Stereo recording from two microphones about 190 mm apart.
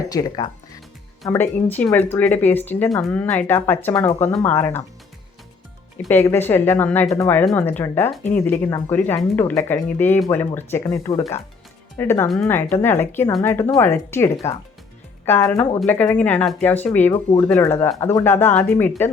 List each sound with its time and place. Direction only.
0.1 s speech: 20° left (ahead or behind)
1.7 s speech: 10° left (ahead or behind)
6.1 s speech: 10° left (ahead or behind)